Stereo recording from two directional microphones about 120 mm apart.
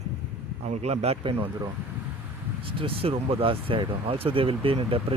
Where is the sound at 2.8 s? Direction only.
50° right (ahead or behind).